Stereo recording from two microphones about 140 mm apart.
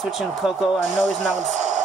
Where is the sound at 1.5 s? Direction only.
60° right (ahead or behind).